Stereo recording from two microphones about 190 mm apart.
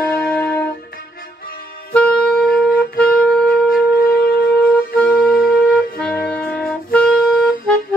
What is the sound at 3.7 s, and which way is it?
Shofar, 55° left (ahead or behind).